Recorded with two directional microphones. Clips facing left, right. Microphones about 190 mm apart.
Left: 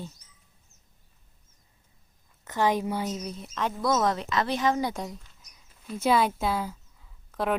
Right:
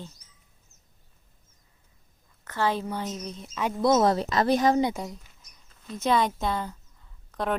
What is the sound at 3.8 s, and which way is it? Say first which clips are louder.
Speech: right 5 dB; 25° right (ahead or behind).